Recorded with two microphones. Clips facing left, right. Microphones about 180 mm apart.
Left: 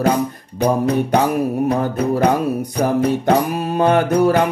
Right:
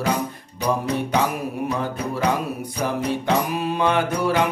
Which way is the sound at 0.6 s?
55° left (ahead or behind).